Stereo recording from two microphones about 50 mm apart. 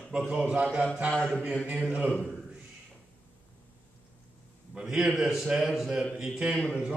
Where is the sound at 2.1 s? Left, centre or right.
Left.